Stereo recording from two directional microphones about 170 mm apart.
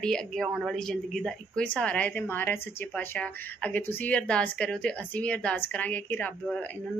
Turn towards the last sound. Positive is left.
turn(degrees=5)  # may be behind; listen again after turning